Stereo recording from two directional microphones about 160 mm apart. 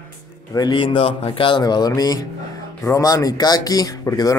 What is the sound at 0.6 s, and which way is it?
Speech, 30° left (ahead or behind).